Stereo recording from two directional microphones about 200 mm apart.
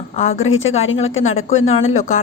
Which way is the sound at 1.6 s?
35° left (ahead or behind).